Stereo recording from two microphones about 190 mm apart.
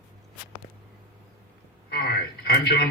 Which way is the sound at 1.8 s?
55° left (ahead or behind).